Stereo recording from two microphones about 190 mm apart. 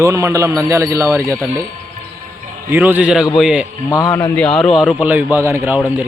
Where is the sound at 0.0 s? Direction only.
15° right (ahead or behind).